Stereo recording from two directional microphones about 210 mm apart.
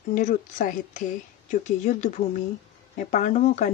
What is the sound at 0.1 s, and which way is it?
Speech, 35° left (ahead or behind).